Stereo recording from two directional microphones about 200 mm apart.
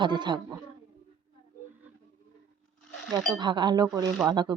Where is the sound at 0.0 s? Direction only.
20° right (ahead or behind).